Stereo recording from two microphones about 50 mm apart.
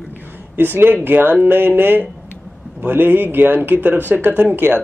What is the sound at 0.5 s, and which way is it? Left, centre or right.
Speech, right.